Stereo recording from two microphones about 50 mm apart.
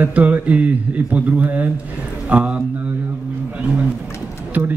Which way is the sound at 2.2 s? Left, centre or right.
Right.